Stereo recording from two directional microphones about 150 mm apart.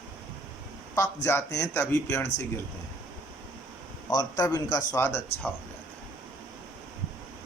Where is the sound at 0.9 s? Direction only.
20° left (ahead or behind).